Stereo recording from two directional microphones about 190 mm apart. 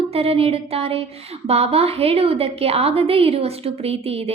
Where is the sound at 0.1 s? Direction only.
30° right (ahead or behind).